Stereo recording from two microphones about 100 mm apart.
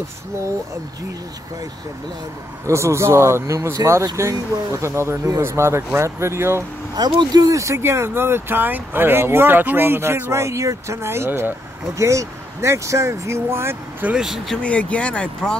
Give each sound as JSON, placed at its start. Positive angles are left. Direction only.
{"t": 2.6, "sound": "speech", "side_deg": -30}
{"t": 7.1, "sound": "speech", "side_deg": -45}
{"t": 14.1, "sound": "speech", "side_deg": -5}
{"t": 14.6, "sound": "speech", "side_deg": 15}